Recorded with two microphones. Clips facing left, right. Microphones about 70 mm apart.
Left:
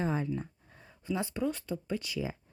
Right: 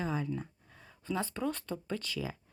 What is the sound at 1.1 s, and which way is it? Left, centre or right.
Speech, centre.